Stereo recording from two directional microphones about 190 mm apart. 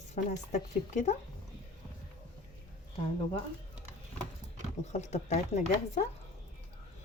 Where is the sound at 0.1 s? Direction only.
35° left (ahead or behind).